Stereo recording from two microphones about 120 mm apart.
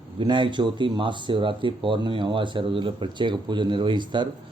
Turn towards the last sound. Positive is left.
turn(degrees=-40)  # may be behind; listen again after turning